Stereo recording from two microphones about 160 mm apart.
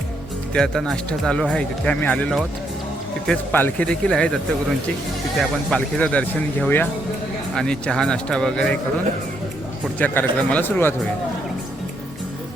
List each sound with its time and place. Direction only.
0.5 s speech: 5° left (ahead or behind)
5.4 s speech: 5° left (ahead or behind)
10.0 s speech: 10° left (ahead or behind)